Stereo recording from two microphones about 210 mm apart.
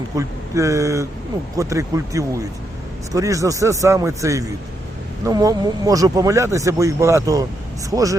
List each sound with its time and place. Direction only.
0.2 s speech: 15° right (ahead or behind)